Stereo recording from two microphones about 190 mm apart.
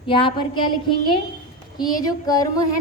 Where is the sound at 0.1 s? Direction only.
25° left (ahead or behind).